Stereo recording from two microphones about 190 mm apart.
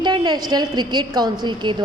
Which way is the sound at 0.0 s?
25° right (ahead or behind).